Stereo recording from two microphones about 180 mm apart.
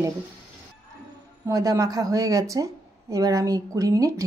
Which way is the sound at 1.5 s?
20° right (ahead or behind).